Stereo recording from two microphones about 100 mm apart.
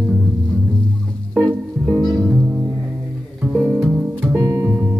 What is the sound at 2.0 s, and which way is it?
Music, 5° left (ahead or behind).